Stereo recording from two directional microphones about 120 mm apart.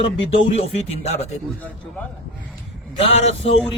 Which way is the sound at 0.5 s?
60° left (ahead or behind).